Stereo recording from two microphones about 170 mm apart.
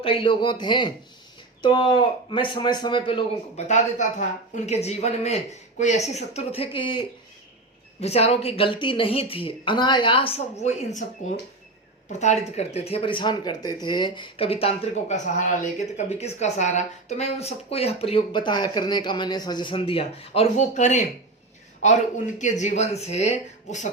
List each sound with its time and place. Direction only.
0.0 s a man's voice: 30° left (ahead or behind)
3.7 s speech: 45° left (ahead or behind); by 7.0 s 30° left (ahead or behind)
8.0 s speech: 35° left (ahead or behind)
12.0 s speech: 40° left (ahead or behind)